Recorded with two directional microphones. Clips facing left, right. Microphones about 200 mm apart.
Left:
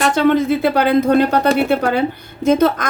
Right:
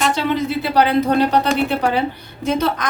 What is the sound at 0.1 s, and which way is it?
A woman's voice, 50° left (ahead or behind).